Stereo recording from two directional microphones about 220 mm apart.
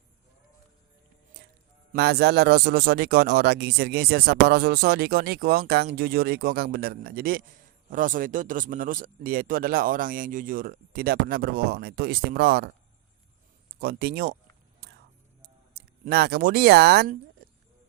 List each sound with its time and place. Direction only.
1.9 s speech: 45° right (ahead or behind)
13.7 s speech: 45° right (ahead or behind)
15.4 s speech: 45° right (ahead or behind)